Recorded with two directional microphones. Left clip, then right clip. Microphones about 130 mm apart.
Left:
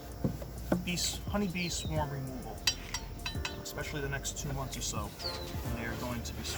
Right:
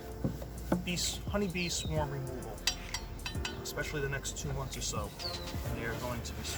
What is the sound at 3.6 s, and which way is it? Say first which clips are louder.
Speech: right 2 dB; 35° right (ahead or behind).